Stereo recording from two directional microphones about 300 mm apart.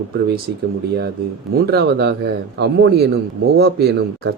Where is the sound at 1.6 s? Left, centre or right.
Right.